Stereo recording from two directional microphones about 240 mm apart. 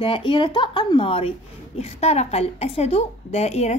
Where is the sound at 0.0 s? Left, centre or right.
Left.